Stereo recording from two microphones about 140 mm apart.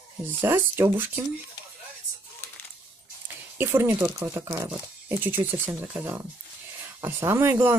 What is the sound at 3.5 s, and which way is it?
Speech, 15° right (ahead or behind).